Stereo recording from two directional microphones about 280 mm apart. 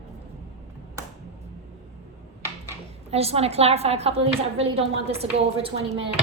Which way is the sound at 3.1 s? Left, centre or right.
Right.